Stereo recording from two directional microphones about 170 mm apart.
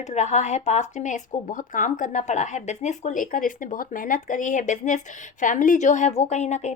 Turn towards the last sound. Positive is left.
turn(degrees=40)  # may be behind; listen again after turning